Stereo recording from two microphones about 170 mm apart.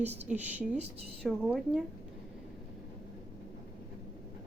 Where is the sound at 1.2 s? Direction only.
Centre (ahead or behind).